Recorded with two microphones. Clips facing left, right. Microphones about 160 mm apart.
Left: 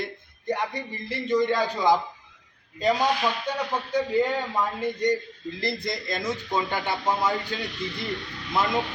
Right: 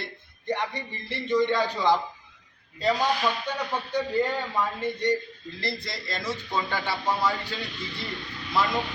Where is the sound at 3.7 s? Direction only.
10° left (ahead or behind).